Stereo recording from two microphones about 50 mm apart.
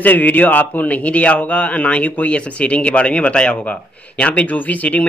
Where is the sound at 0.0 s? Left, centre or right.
Left.